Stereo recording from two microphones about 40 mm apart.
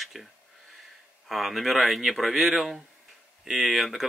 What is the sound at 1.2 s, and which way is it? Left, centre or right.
Speech, centre.